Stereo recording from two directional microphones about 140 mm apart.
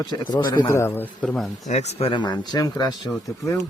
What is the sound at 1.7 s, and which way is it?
Speech, 50° left (ahead or behind).